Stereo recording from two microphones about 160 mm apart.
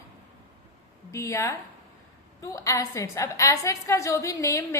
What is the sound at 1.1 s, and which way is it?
A woman's voice, 20° left (ahead or behind).